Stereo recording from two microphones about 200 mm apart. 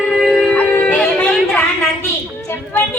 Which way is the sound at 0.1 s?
Centre (ahead or behind).